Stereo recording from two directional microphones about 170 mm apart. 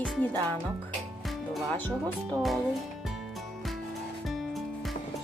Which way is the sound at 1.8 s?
10° left (ahead or behind).